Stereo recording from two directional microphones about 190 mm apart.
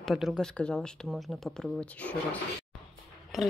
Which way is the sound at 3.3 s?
Centre (ahead or behind).